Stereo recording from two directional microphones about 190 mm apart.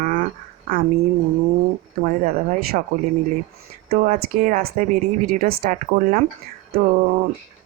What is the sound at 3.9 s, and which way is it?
A woman's voice, 45° right (ahead or behind).